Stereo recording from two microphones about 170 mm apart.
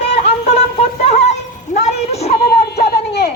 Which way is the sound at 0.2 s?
40° left (ahead or behind).